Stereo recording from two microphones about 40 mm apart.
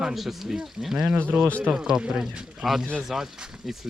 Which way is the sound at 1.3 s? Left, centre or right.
Right.